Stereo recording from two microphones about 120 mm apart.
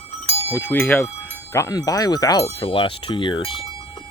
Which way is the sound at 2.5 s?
45° left (ahead or behind).